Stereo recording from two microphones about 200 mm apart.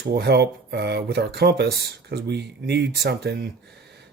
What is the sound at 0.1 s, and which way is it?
Speech, 55° right (ahead or behind).